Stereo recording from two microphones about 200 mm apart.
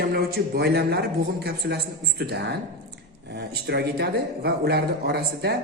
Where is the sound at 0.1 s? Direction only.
50° right (ahead or behind).